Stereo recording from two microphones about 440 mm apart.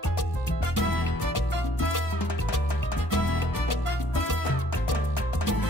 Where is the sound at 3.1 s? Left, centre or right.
Left.